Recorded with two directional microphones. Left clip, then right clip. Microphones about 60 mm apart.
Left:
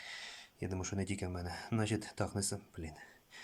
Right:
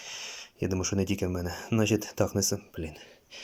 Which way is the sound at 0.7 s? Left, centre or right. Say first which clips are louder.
Right 10 dB; centre.